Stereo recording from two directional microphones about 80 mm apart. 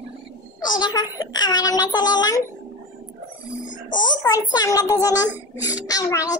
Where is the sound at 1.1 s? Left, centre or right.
Left.